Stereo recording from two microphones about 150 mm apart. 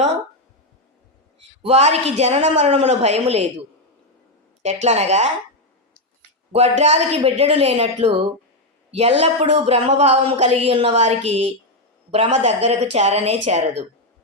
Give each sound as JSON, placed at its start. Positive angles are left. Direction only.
{"t": 1.6, "sound": "speech", "side_deg": -45}
{"t": 4.6, "sound": "speech", "side_deg": -50}
{"t": 6.7, "sound": "speech", "side_deg": -50}